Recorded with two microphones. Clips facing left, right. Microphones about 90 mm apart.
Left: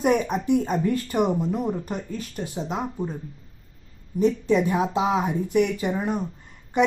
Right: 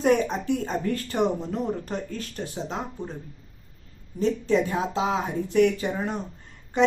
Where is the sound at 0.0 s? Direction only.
10° left (ahead or behind).